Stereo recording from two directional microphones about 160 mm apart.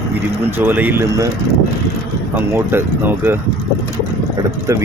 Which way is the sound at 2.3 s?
15° right (ahead or behind).